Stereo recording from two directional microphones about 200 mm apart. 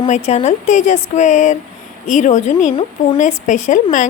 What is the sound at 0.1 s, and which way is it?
Speech, 35° left (ahead or behind).